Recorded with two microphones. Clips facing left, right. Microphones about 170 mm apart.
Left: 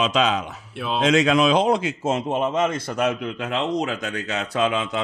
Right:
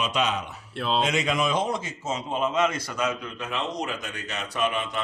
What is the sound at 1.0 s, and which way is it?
A man's voice, 90° left.